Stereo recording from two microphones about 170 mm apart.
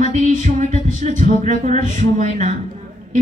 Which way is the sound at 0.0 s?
45° right (ahead or behind).